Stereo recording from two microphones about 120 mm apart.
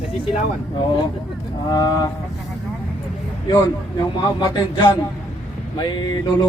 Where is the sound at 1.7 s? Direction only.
35° left (ahead or behind).